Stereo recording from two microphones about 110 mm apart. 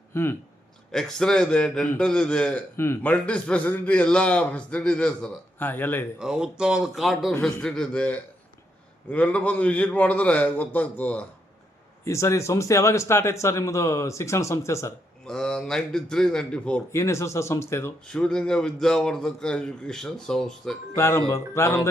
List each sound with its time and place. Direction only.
0.1 s speech: 20° left (ahead or behind)
0.9 s a man's voice: 5° left (ahead or behind)
2.7 s a man's voice: 25° left (ahead or behind)
6.1 s a man's voice: 5° right (ahead or behind); by 11.3 s 15° left (ahead or behind)
12.0 s speech: 25° left (ahead or behind)
15.3 s a man's voice: 5° left (ahead or behind)
16.9 s speech: 25° left (ahead or behind)
18.1 s a man's voice: 5° left (ahead or behind)
20.9 s speech: 25° left (ahead or behind)